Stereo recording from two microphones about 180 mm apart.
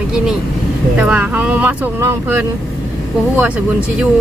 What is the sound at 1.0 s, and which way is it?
Speech, 10° right (ahead or behind).